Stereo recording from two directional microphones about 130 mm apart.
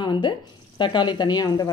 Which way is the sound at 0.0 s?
35° left (ahead or behind).